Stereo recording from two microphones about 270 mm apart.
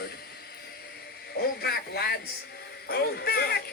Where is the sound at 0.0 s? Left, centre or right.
Left.